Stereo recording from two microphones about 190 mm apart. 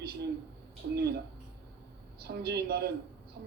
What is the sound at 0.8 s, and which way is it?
Speech, 65° right (ahead or behind).